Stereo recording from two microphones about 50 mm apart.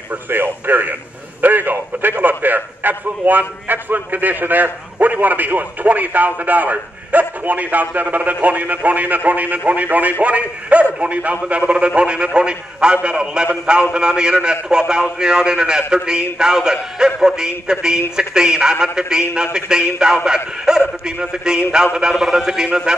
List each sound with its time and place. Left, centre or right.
0.3 s a man's voice: right; by 23.0 s centre